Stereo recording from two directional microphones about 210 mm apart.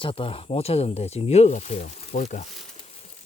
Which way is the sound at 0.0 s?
25° left (ahead or behind).